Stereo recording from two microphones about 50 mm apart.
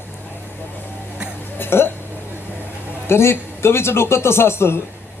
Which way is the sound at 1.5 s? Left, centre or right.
Left.